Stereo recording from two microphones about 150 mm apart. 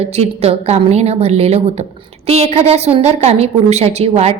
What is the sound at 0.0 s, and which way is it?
A woman's voice, 45° right (ahead or behind).